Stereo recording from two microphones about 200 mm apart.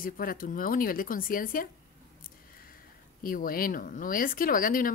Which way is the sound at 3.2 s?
45° left (ahead or behind).